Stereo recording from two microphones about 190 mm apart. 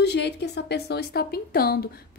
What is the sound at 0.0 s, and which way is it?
Speech, 60° left (ahead or behind).